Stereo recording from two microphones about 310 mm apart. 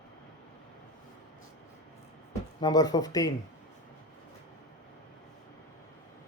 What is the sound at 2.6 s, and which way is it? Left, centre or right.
Speech, centre.